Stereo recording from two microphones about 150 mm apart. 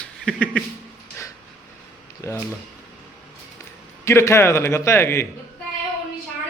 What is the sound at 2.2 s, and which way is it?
Speech, 20° left (ahead or behind).